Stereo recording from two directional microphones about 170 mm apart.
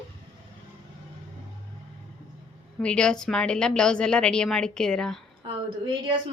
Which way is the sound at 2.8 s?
5° left (ahead or behind).